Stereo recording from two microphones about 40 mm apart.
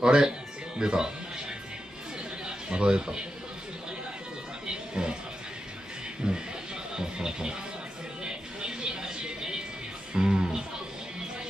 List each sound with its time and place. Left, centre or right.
0.0 s speech: centre
2.4 s a man's voice: right
4.6 s a sound: right
6.2 s speech: right
8.2 s music: right